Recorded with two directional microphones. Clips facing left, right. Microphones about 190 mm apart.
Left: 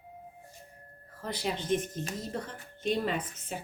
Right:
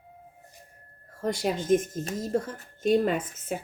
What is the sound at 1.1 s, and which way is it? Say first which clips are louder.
A woman's voice: right 6 dB; 45° right (ahead or behind).